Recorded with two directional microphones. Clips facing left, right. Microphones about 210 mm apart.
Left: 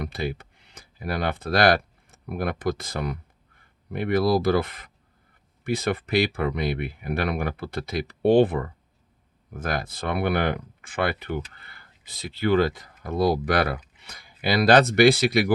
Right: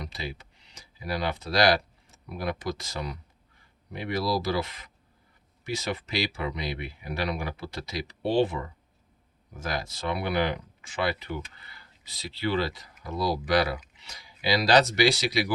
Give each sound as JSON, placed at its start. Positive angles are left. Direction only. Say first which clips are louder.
{"t": 0.0, "sound": "speech", "louder": "left 8 dB", "side_deg": 55}